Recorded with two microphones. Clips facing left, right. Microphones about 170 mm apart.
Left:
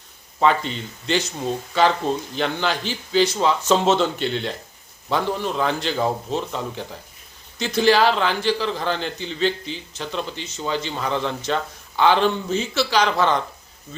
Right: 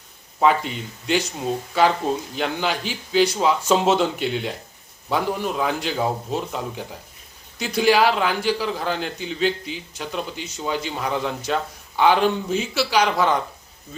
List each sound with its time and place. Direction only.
0.3 s a man's voice: 5° right (ahead or behind)